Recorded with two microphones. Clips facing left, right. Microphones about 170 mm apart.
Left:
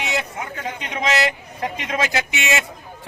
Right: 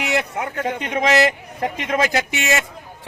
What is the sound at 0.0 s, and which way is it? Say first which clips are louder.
Speech: right 4 dB; 65° right (ahead or behind).